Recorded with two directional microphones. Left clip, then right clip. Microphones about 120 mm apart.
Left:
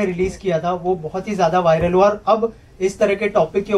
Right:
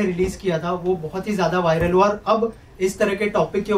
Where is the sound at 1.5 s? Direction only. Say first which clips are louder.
Left 4 dB; 20° left (ahead or behind).